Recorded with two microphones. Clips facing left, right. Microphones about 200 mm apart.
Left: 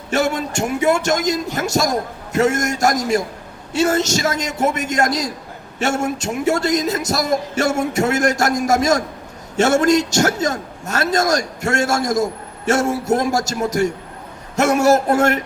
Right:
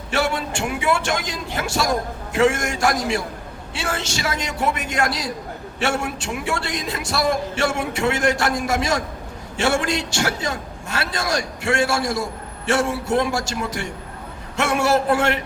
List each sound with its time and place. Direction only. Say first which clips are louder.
0.1 s a man's voice: left 3 dB; 40° left (ahead or behind)